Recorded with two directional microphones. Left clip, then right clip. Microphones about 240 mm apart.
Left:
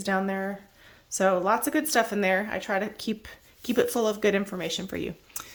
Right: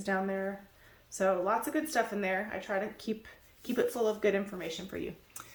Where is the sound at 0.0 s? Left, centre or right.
Left.